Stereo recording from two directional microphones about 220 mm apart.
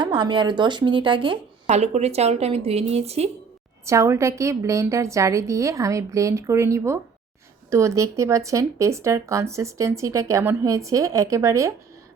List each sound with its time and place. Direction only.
0.0 s speech: 20° right (ahead or behind)
3.8 s speech: 15° right (ahead or behind)